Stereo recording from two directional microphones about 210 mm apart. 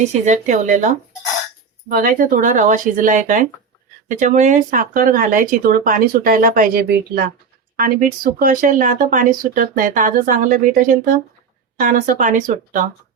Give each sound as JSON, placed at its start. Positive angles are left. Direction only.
{"t": 0.0, "sound": "speech", "side_deg": -35}